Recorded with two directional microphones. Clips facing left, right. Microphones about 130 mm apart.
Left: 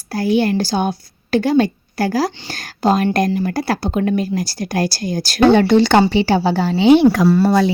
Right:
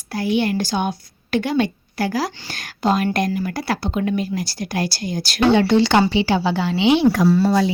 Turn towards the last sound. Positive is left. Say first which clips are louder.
# left 3 dB
turn(degrees=60)  # may be behind; listen again after turning